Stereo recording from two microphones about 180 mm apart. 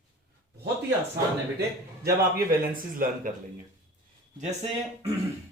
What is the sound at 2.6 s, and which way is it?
Speech, 50° right (ahead or behind).